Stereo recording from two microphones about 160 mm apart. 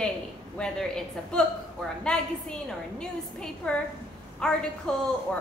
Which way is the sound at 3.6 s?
5° left (ahead or behind).